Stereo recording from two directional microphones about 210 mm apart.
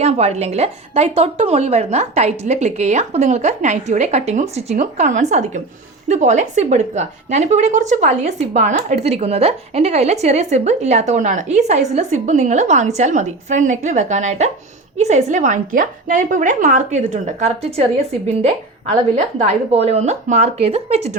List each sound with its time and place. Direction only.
0.0 s a woman's voice: 30° right (ahead or behind)